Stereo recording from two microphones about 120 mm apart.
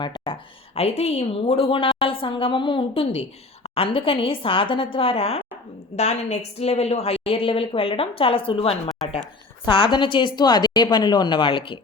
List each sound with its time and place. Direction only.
0.0 s a woman's voice: 35° left (ahead or behind)
0.8 s a woman's voice: 60° left (ahead or behind)
6.0 s a woman's voice: 70° left (ahead or behind); by 11.8 s 45° left (ahead or behind)